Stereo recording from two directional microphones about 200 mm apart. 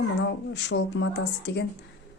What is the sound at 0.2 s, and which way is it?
Speech, 60° left (ahead or behind).